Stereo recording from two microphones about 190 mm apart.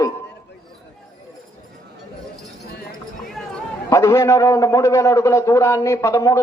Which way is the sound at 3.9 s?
15° left (ahead or behind).